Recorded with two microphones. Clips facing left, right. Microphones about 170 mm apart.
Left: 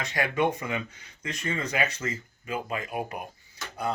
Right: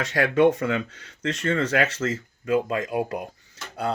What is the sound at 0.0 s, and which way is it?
Speech, 80° right.